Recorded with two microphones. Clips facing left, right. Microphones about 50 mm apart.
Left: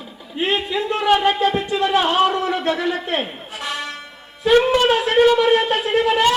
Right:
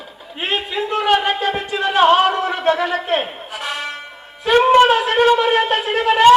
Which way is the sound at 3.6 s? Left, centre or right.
Centre.